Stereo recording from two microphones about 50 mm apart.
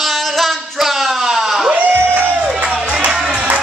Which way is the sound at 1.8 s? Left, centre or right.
Left.